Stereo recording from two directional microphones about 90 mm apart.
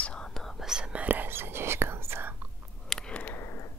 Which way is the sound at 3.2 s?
25° left (ahead or behind).